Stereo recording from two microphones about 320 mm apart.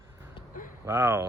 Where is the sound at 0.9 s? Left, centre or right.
Centre.